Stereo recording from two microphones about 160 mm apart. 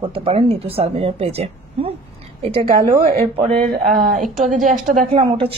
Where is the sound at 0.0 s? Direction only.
35° right (ahead or behind).